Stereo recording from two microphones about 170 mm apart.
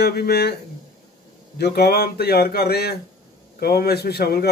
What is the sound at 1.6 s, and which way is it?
A man's voice, 70° left (ahead or behind).